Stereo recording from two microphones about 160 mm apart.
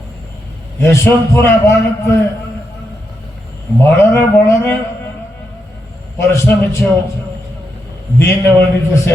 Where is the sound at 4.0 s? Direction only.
15° left (ahead or behind).